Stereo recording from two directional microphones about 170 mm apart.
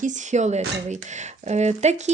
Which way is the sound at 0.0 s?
45° right (ahead or behind).